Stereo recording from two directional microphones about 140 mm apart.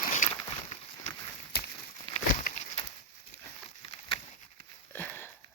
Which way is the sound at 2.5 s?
90° left.